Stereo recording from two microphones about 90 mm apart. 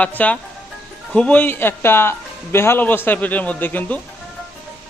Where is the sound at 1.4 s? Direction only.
25° left (ahead or behind).